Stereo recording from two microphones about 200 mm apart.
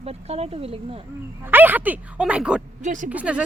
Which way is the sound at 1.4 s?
10° right (ahead or behind).